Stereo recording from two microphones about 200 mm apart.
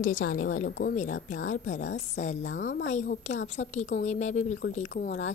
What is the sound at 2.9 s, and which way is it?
Speech, 35° left (ahead or behind).